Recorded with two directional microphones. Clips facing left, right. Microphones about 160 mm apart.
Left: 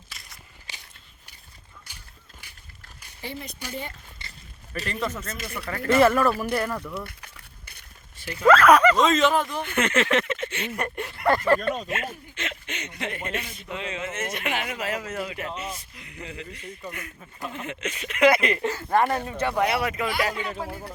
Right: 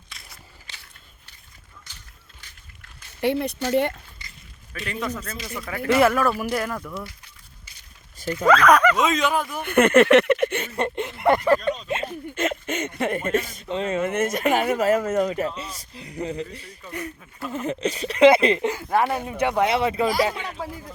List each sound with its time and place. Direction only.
0.1 s a sound: centre (ahead or behind)
3.2 s speech: 70° right (ahead or behind)
4.9 s speech: centre (ahead or behind)
7.0 s a sound: 65° left (ahead or behind)
8.4 s speech: 5° left (ahead or behind)
9.6 s a sound: 55° right (ahead or behind)
10.8 s speech: 20° right (ahead or behind)
11.9 s speech: 30° right (ahead or behind)
12.3 s speech: 45° right (ahead or behind); by 18.6 s 30° right (ahead or behind)
18.6 s speech: 15° right (ahead or behind); by 20.3 s 35° right (ahead or behind)